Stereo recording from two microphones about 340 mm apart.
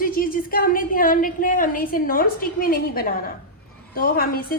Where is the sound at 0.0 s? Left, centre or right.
Left.